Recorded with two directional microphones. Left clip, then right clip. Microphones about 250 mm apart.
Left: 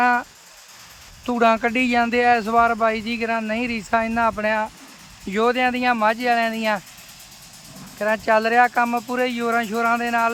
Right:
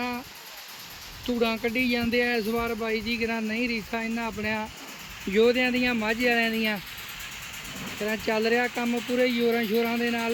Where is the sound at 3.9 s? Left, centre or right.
Left.